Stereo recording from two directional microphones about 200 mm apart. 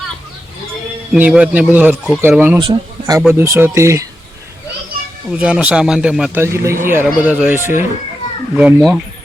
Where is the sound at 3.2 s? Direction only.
10° right (ahead or behind).